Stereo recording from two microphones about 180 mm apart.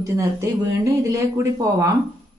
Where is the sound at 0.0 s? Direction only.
15° right (ahead or behind).